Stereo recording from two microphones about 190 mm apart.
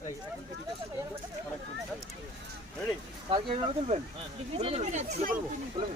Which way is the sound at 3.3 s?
30° right (ahead or behind).